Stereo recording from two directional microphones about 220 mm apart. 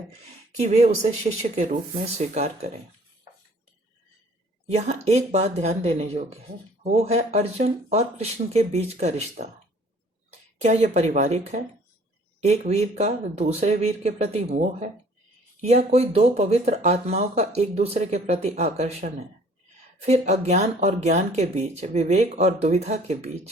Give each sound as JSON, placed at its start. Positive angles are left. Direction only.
{"t": 0.6, "sound": "speech", "side_deg": -30}
{"t": 4.7, "sound": "speech", "side_deg": -30}
{"t": 10.6, "sound": "speech", "side_deg": -30}